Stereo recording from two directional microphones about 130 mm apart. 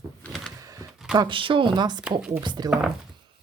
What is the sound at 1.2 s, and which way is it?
Speech, 40° right (ahead or behind).